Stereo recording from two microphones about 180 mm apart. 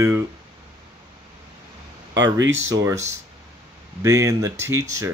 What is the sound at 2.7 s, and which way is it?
Speech, 15° right (ahead or behind).